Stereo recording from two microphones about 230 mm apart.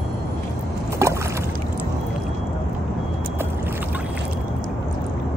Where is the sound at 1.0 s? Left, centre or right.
Centre.